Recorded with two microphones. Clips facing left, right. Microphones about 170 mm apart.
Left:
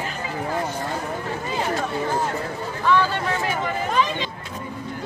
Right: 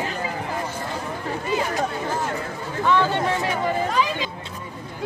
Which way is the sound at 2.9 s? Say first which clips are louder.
Even; 20° right (ahead or behind).